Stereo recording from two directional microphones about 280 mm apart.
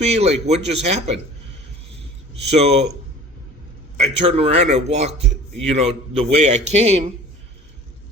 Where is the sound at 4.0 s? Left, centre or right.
Right.